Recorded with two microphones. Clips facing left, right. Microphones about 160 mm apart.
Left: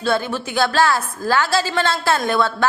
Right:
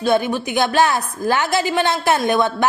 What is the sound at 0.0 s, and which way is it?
A woman's voice, 15° right (ahead or behind).